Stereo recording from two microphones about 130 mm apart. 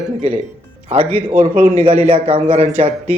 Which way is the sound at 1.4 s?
60° right (ahead or behind).